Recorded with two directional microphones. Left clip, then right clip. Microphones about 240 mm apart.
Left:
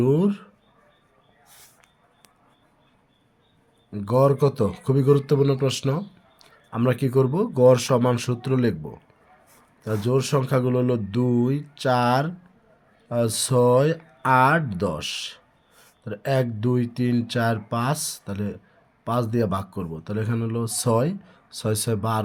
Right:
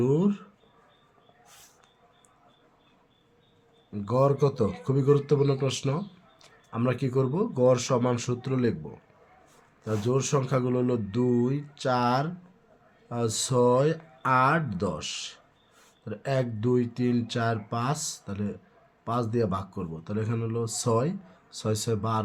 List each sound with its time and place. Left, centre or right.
0.0 s speech: left
3.9 s speech: left